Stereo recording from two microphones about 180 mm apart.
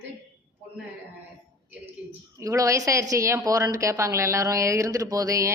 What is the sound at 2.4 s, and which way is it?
A woman's voice, 15° right (ahead or behind).